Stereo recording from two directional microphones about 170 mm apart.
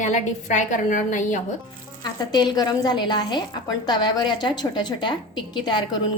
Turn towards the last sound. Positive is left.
turn(degrees=25)  # may be behind; listen again after turning